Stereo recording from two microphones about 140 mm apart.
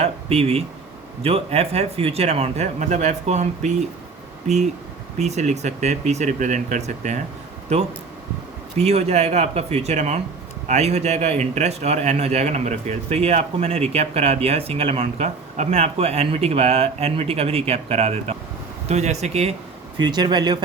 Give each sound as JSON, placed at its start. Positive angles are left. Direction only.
{"t": 0.0, "sound": "a sound", "side_deg": -45}
{"t": 1.2, "sound": "a man's voice", "side_deg": -45}
{"t": 8.8, "sound": "a man's voice", "side_deg": -45}
{"t": 20.0, "sound": "speech", "side_deg": -30}